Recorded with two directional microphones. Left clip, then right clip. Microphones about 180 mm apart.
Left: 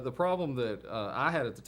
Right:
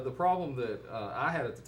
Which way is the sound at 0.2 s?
45° left (ahead or behind).